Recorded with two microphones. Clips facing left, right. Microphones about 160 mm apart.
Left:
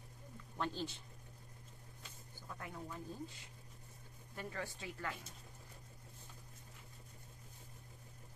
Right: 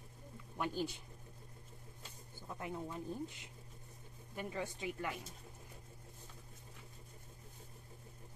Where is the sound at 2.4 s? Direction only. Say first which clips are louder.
Right 5 dB; 20° right (ahead or behind).